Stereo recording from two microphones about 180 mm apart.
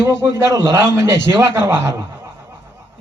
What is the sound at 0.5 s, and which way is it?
A man's voice, 20° right (ahead or behind).